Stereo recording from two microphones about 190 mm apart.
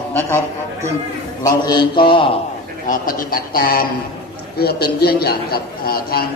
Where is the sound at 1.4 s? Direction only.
20° left (ahead or behind).